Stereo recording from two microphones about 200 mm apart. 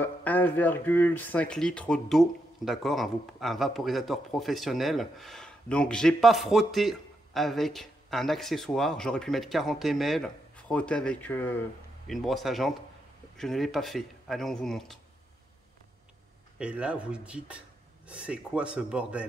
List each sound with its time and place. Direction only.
0.0 s speech: 10° left (ahead or behind)
16.5 s speech: 5° right (ahead or behind)